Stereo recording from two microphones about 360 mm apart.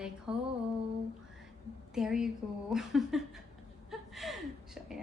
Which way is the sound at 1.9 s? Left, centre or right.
Centre.